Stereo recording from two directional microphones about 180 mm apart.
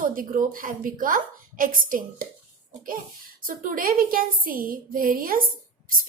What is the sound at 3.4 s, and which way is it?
A woman's voice, 50° right (ahead or behind).